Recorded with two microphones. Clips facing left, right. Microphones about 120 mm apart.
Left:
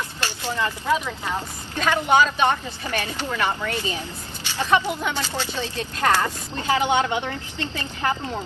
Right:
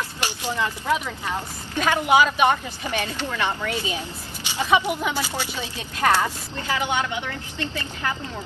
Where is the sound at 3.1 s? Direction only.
10° left (ahead or behind).